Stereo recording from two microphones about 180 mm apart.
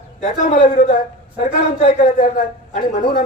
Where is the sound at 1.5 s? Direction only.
40° left (ahead or behind).